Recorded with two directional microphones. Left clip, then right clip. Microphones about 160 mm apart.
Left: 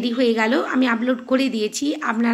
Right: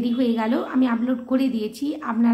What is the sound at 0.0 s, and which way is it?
A woman's voice, 20° left (ahead or behind).